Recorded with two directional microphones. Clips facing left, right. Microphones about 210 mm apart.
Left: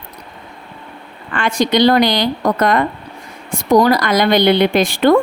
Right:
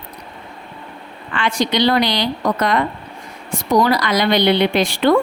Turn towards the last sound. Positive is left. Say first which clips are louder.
# left 3 dB
turn(degrees=45)  # may be behind; listen again after turning